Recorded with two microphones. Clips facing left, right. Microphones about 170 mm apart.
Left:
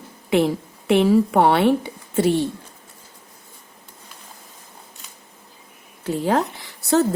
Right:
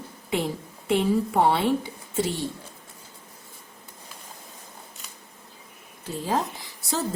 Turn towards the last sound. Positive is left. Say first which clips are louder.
# left 11 dB
turn(degrees=70)  # may be behind; listen again after turning